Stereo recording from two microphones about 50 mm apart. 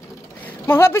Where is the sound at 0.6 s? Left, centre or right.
Left.